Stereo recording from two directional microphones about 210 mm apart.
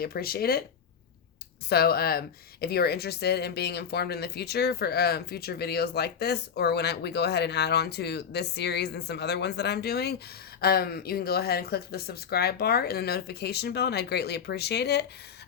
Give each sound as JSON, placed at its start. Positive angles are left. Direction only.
{"t": 0.0, "sound": "a woman's voice", "side_deg": 45}
{"t": 1.7, "sound": "a woman's voice", "side_deg": 50}